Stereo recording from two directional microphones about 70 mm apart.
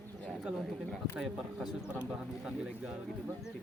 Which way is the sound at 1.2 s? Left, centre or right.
Centre.